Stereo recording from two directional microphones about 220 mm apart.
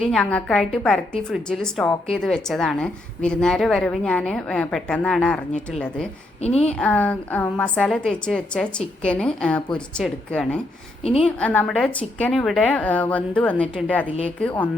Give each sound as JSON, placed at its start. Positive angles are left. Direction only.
{"t": 0.1, "sound": "a woman's voice", "side_deg": 5}
{"t": 6.4, "sound": "a woman's voice", "side_deg": 30}
{"t": 6.7, "sound": "a woman's voice", "side_deg": 5}